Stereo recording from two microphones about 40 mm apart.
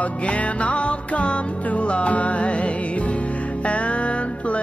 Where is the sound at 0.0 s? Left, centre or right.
Left.